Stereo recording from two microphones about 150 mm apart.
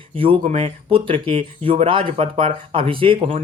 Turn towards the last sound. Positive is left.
turn(degrees=-35)  # may be behind; listen again after turning